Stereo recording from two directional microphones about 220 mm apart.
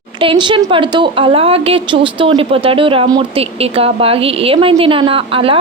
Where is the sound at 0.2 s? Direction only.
20° right (ahead or behind).